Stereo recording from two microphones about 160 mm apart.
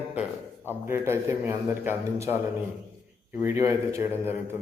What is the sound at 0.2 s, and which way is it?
A man's voice, 15° right (ahead or behind).